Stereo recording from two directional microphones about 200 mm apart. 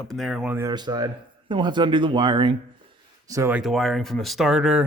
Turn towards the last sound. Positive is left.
turn(degrees=-5)  # may be behind; listen again after turning